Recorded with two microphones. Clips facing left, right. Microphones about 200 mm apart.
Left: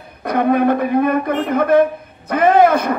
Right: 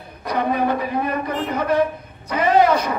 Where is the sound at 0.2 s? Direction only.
55° left (ahead or behind).